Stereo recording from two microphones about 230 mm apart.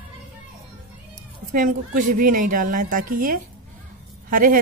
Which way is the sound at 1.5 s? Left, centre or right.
Right.